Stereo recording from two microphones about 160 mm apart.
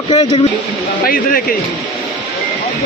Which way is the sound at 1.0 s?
60° left (ahead or behind).